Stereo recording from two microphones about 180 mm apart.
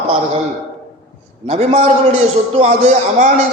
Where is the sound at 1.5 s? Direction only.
35° right (ahead or behind).